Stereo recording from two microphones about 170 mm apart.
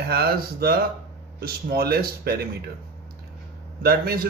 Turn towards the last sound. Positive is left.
turn(degrees=-65)  # may be behind; listen again after turning